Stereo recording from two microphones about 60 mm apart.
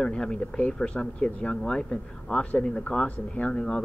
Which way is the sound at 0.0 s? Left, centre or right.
Centre.